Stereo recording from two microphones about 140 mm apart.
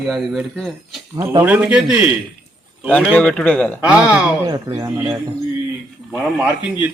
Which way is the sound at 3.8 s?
10° right (ahead or behind).